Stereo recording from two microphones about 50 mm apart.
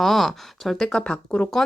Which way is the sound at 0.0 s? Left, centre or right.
Centre.